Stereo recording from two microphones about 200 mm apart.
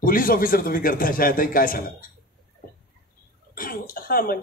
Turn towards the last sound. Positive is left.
turn(degrees=45)  # may be behind; listen again after turning